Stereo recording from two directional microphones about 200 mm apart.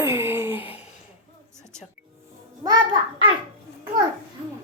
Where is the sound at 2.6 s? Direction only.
20° right (ahead or behind).